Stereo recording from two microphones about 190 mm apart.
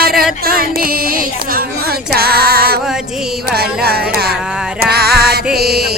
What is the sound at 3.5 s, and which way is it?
Carnatic music, 55° right (ahead or behind).